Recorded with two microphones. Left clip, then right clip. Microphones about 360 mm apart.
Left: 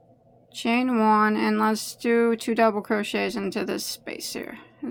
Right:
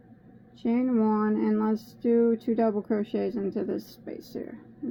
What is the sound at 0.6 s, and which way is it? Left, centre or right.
Speech, left.